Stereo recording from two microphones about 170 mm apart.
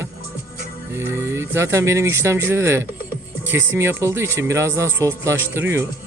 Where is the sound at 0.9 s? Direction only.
15° right (ahead or behind).